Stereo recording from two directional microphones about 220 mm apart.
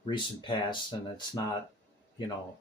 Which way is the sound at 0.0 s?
20° left (ahead or behind).